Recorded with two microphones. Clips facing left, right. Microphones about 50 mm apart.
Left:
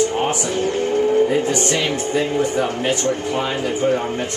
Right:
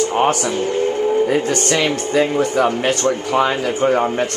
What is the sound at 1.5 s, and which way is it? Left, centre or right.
Speech, right.